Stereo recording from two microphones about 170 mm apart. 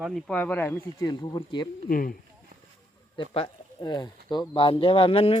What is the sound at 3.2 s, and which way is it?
Speech, 25° left (ahead or behind).